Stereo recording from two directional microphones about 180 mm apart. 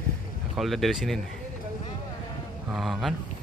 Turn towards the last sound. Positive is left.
turn(degrees=0)  # may be behind; listen again after turning